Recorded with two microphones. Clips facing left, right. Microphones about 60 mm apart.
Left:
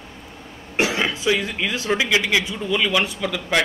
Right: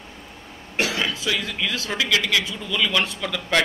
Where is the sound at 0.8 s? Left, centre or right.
Left; by 3.7 s centre.